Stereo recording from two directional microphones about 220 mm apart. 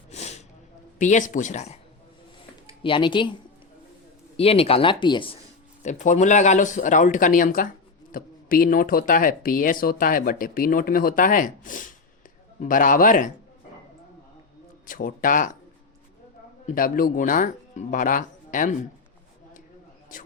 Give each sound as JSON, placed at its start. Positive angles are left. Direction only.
{"t": 0.1, "sound": "snort", "side_deg": 30}
{"t": 0.9, "sound": "speech", "side_deg": 35}
{"t": 2.8, "sound": "speech", "side_deg": 20}
{"t": 4.4, "sound": "speech", "side_deg": 25}
{"t": 5.8, "sound": "speech", "side_deg": 35}
{"t": 14.8, "sound": "speech", "side_deg": 40}
{"t": 16.6, "sound": "speech", "side_deg": 40}